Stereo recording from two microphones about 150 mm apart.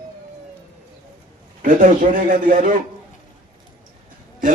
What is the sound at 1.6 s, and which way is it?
A man's voice, 60° right (ahead or behind).